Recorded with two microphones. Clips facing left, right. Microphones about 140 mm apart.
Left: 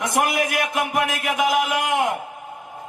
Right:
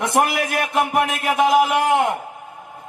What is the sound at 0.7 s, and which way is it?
Speech, 30° right (ahead or behind).